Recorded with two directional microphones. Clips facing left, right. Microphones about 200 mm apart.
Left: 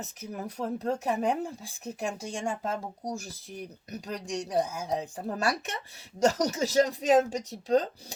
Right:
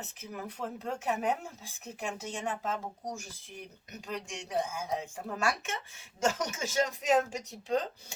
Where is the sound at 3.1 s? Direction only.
40° left (ahead or behind).